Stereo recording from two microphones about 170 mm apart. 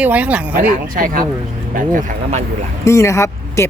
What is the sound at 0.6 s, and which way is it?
Speech, 50° right (ahead or behind).